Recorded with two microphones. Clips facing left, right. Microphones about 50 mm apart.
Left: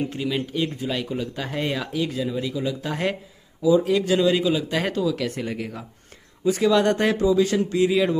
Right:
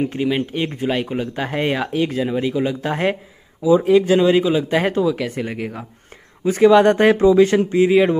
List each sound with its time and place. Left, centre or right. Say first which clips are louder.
0.0 s speech: right 6 dB; right
3.6 s speech: right 5 dB; right
6.4 s speech: right 7 dB; right
7.2 s speech: right 6 dB; right
7.7 s speech: right 6 dB; right